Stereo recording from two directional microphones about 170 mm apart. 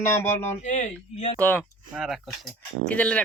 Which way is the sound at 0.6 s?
45° left (ahead or behind).